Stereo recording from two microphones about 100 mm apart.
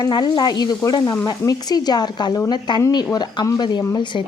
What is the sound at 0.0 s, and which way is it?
A woman's voice, 45° left (ahead or behind).